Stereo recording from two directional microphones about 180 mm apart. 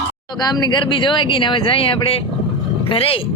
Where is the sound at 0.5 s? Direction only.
25° left (ahead or behind).